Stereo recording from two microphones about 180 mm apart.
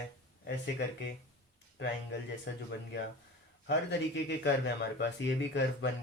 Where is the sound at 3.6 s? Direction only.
70° left (ahead or behind).